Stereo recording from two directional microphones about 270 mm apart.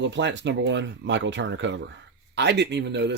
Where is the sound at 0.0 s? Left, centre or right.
Right.